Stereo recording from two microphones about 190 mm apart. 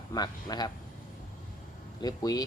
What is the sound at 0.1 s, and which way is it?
Speech, 20° left (ahead or behind).